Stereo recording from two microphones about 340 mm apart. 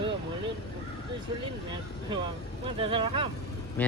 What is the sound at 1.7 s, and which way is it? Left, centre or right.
Speech, centre.